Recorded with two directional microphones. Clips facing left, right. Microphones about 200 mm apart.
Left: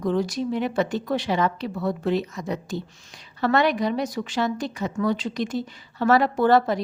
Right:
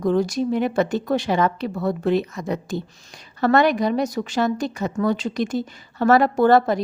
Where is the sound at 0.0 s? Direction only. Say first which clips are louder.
Right 4 dB; 45° right (ahead or behind).